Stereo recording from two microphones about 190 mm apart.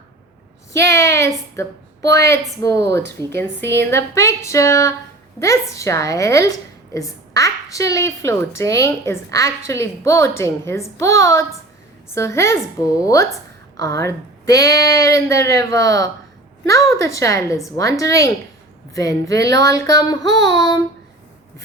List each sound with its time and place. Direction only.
0.9 s a sound: 15° left (ahead or behind)
2.1 s a woman's voice: 15° left (ahead or behind)
19.4 s a sound: 65° right (ahead or behind)
19.6 s a woman's voice: 20° left (ahead or behind)
20.2 s child singing: 70° right (ahead or behind)
20.6 s child singing: 25° left (ahead or behind)